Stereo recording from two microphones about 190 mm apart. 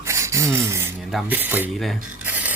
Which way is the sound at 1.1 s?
5° right (ahead or behind).